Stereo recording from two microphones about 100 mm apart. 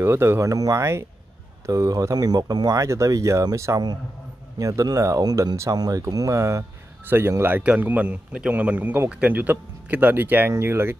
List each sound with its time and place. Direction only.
0.0 s a man's voice: 25° right (ahead or behind)